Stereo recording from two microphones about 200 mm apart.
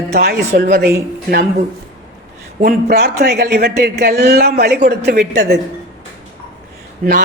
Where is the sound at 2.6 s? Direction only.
50° right (ahead or behind).